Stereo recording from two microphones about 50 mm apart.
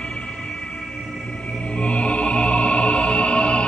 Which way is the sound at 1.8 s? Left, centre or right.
Left.